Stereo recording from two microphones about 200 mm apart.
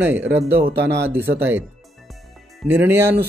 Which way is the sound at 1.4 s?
10° right (ahead or behind).